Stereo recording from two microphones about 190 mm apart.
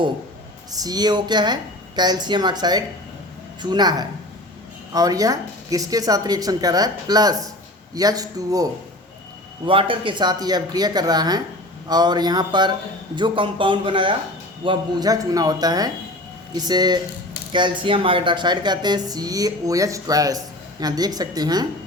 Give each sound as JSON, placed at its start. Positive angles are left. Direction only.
{"t": 0.7, "sound": "speech", "side_deg": -20}